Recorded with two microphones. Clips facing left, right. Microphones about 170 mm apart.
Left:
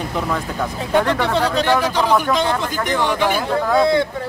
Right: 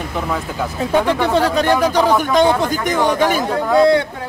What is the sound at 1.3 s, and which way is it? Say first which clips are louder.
Speech: right 2 dB; 45° right (ahead or behind).